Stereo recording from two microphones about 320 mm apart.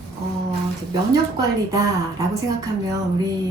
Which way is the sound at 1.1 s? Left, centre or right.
Centre.